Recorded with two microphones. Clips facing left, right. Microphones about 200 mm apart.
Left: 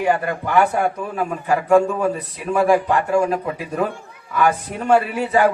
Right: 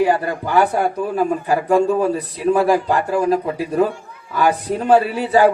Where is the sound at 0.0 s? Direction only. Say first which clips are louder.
Right 3 dB; 35° right (ahead or behind).